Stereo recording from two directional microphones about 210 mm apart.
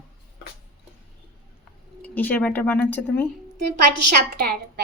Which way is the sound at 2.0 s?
10° left (ahead or behind).